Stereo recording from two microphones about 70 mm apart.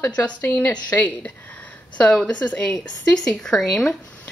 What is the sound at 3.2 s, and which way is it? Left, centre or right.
Speech, centre.